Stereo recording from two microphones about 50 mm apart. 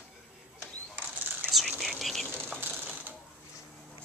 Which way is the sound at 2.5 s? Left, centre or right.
Right.